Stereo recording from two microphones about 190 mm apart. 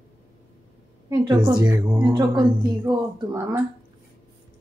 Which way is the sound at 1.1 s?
20° right (ahead or behind).